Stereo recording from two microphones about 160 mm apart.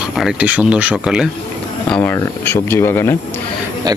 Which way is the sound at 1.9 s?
15° left (ahead or behind).